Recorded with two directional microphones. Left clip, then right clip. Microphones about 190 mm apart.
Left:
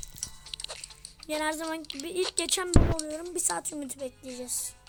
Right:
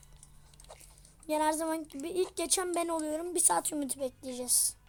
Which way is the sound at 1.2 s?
5° right (ahead or behind).